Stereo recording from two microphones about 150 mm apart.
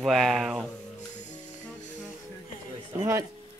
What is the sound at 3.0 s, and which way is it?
Speech, 15° right (ahead or behind).